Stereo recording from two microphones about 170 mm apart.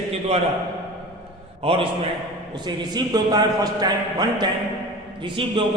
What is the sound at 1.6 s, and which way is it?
A man's voice, 35° right (ahead or behind).